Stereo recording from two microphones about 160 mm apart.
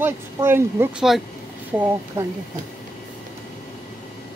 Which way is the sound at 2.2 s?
15° right (ahead or behind).